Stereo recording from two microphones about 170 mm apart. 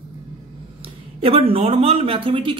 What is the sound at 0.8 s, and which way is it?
Speech, 35° right (ahead or behind).